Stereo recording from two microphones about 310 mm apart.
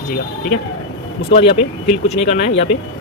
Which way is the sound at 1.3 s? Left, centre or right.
Centre.